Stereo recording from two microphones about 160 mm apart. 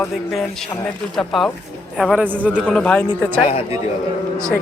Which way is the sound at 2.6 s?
5° left (ahead or behind).